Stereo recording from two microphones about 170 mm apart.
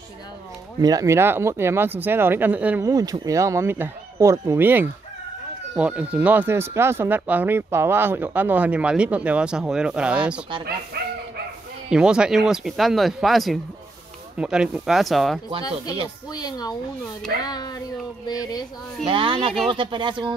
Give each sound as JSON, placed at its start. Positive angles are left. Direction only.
{"t": 0.7, "sound": "speech", "side_deg": -20}
{"t": 2.9, "sound": "speech", "side_deg": -20}
{"t": 11.9, "sound": "speech", "side_deg": -5}
{"t": 16.3, "sound": "speech", "side_deg": 25}
{"t": 19.0, "sound": "speech", "side_deg": -30}